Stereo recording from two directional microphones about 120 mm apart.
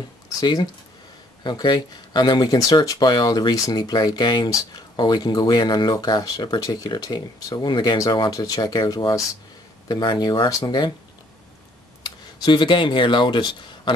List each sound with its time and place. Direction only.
0.4 s speech: 35° left (ahead or behind)
12.0 s speech: 40° left (ahead or behind)